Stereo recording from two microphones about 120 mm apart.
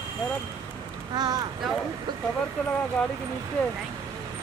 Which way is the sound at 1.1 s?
35° right (ahead or behind).